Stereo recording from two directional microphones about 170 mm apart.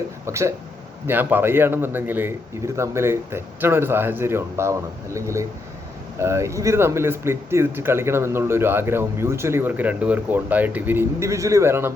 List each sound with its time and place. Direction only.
0.3 s speech: 15° right (ahead or behind)